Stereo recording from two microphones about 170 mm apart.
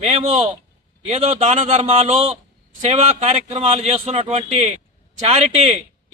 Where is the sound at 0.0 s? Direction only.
40° right (ahead or behind).